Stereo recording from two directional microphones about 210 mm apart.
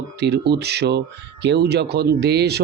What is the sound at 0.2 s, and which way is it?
Speech, 50° right (ahead or behind).